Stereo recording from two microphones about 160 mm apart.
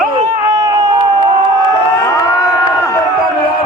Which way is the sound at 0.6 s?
25° right (ahead or behind).